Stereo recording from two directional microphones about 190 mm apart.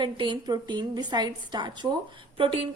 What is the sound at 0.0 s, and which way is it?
A woman's voice, 25° right (ahead or behind).